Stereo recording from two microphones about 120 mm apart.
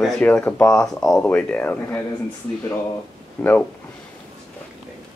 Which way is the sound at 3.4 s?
10° left (ahead or behind).